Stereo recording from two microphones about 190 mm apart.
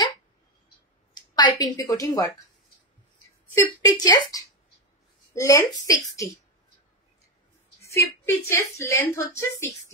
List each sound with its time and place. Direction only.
1.1 s a woman's voice: 20° left (ahead or behind)
3.5 s a woman's voice: 20° left (ahead or behind)
7.8 s a woman's voice: 15° left (ahead or behind)